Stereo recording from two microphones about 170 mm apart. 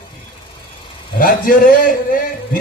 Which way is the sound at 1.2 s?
55° left (ahead or behind).